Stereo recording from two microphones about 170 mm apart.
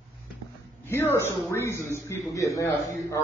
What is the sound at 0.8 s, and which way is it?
A man's voice, 15° left (ahead or behind).